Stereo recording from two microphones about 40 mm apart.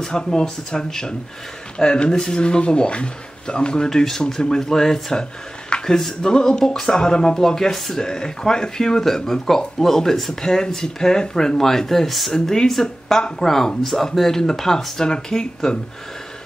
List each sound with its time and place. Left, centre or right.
0.0 s speech: centre
12.3 s speech: centre